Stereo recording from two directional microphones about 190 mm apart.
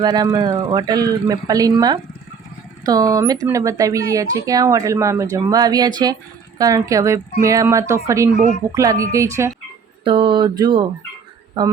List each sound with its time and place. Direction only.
0.0 s a man's voice: 20° right (ahead or behind)
10.0 s a man's voice: 30° right (ahead or behind)